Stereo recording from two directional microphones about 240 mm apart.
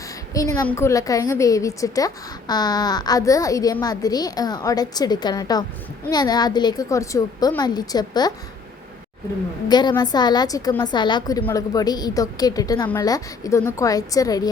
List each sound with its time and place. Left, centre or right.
0.3 s a woman's voice: centre
9.6 s a woman's voice: centre